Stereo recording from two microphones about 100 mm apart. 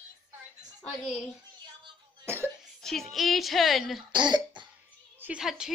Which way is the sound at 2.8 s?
Centre (ahead or behind).